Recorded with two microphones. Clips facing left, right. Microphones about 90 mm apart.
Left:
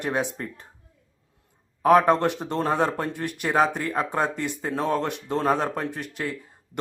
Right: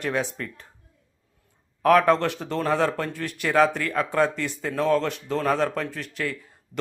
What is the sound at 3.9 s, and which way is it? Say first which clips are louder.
A man's voice: right 3 dB; 30° left (ahead or behind).